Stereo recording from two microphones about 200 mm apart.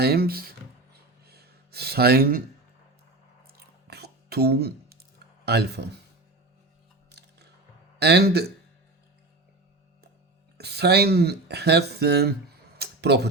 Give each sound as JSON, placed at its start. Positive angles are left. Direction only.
{"t": 0.0, "sound": "speech", "side_deg": -50}
{"t": 1.3, "sound": "a sound", "side_deg": -55}
{"t": 3.4, "sound": "chewing", "side_deg": -55}
{"t": 5.5, "sound": "speech", "side_deg": -55}
{"t": 7.1, "sound": "music", "side_deg": -55}
{"t": 7.9, "sound": "speech", "side_deg": -55}
{"t": 10.6, "sound": "speech", "side_deg": -55}
{"t": 12.8, "sound": "a sound", "side_deg": -55}